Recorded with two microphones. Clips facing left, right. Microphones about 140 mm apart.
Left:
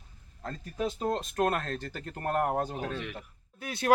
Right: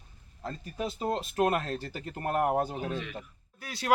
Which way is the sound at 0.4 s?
5° right (ahead or behind).